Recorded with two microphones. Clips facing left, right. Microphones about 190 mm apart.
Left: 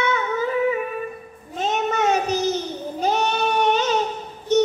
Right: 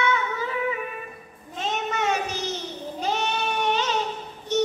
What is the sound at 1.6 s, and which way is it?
Child singing, 40° left (ahead or behind).